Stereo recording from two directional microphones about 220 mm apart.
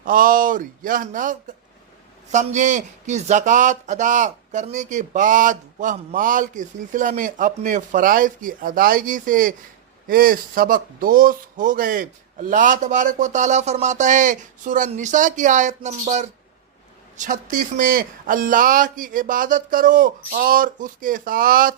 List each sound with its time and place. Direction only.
0.0 s speech: 40° right (ahead or behind)